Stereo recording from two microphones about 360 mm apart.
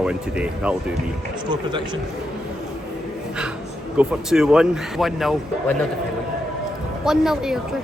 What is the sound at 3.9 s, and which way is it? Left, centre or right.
Speech, centre.